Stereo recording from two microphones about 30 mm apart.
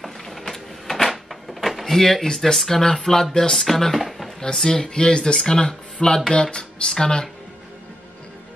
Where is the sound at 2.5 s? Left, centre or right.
Centre.